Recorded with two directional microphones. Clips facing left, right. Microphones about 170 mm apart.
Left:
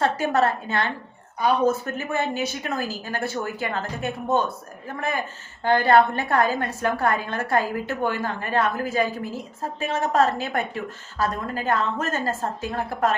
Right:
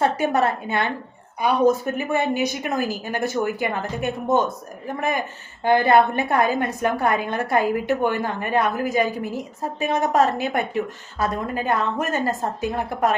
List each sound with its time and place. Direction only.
0.0 s a woman's voice: 15° right (ahead or behind)